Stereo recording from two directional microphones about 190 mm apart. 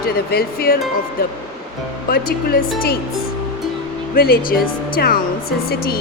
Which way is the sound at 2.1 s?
50° left (ahead or behind).